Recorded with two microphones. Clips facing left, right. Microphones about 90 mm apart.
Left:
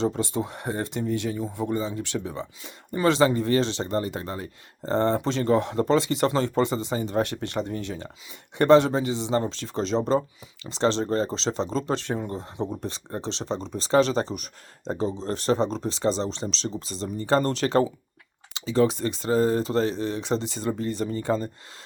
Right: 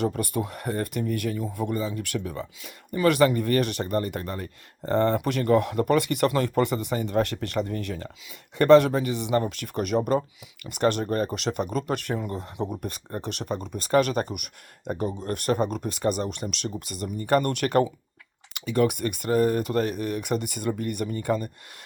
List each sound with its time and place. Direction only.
0.0 s speech: 20° left (ahead or behind)